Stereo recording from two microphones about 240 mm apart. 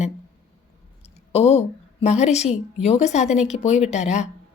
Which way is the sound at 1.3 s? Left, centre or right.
Left.